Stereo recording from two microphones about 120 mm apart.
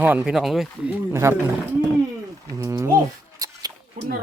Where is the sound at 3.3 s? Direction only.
30° right (ahead or behind).